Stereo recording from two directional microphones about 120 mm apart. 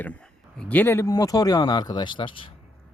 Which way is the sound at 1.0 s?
30° left (ahead or behind).